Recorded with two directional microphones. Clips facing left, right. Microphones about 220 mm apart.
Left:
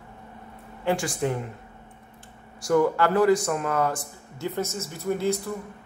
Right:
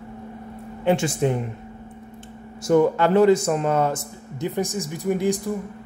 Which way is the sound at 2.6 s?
20° right (ahead or behind).